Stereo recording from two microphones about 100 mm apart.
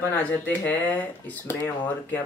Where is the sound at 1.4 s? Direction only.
25° left (ahead or behind).